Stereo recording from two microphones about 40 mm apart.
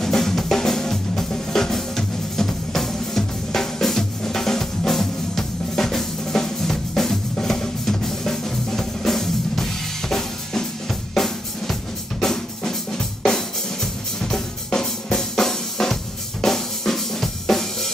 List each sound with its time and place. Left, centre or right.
0.0 s drum kit: centre